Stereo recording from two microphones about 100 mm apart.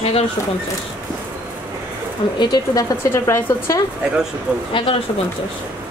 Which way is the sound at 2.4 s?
40° left (ahead or behind).